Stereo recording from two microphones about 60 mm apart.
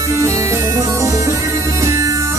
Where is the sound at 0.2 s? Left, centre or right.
Right.